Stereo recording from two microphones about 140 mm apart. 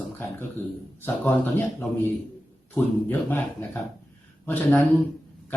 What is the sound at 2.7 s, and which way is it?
Speech, 15° left (ahead or behind).